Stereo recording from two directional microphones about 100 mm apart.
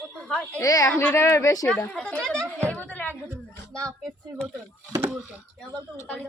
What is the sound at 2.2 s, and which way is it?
A woman's voice, 5° left (ahead or behind).